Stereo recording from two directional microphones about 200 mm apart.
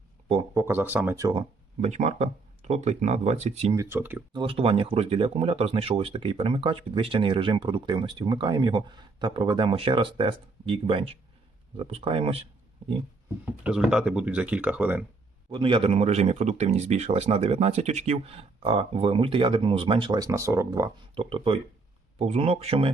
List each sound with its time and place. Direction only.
0.5 s speech: 10° right (ahead or behind); by 3.8 s 30° right (ahead or behind)
3.8 s speech: 10° right (ahead or behind)
4.3 s speech: 25° right (ahead or behind)
13.4 s speech: 5° right (ahead or behind)
15.4 s speech: 25° right (ahead or behind)